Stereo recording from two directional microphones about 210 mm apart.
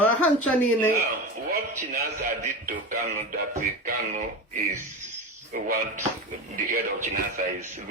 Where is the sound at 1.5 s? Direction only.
45° right (ahead or behind).